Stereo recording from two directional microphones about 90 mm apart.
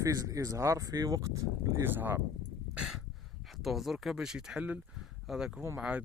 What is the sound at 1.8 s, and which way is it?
Speech, 25° right (ahead or behind).